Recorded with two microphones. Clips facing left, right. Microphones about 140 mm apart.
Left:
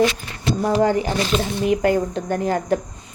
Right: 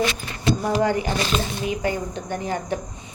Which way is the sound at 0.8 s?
40° left (ahead or behind).